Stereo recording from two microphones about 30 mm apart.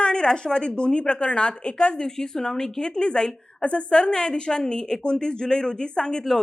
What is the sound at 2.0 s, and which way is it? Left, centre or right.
A woman's voice, left.